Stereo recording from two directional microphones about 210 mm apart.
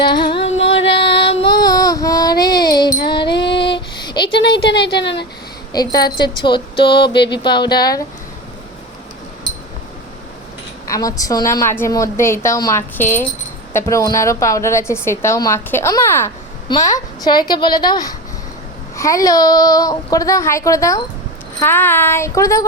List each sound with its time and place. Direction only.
0.0 s speech: 20° left (ahead or behind)
0.4 s music: 65° left (ahead or behind)
0.9 s child singing: 25° left (ahead or behind)
3.0 s music: 20° left (ahead or behind)
3.6 s a sound: 20° left (ahead or behind)
4.7 s speech: 55° left (ahead or behind)
5.7 s speech: 20° left (ahead or behind)
10.8 s a woman's voice: 15° left (ahead or behind)